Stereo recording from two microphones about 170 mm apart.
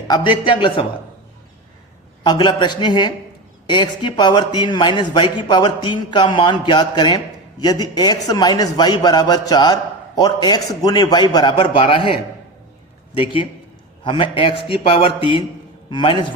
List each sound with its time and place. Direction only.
0.1 s a man's voice: 30° left (ahead or behind)
2.2 s a man's voice: 25° left (ahead or behind)
13.1 s a man's voice: 30° left (ahead or behind)